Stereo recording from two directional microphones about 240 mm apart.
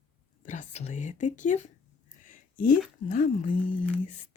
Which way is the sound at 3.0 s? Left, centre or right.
Left.